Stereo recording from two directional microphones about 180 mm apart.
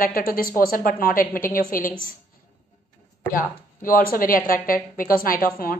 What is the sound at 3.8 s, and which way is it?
A woman's voice, 50° left (ahead or behind).